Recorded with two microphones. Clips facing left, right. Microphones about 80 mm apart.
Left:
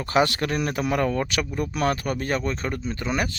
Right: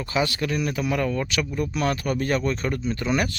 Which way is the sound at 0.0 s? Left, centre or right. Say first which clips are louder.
Left 3 dB; left.